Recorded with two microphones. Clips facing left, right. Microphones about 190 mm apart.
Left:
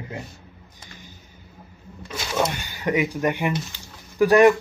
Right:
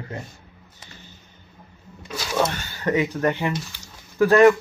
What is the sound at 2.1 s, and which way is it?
Speech, 15° left (ahead or behind).